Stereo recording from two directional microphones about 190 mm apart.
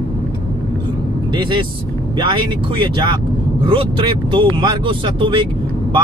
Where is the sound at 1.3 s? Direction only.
25° right (ahead or behind).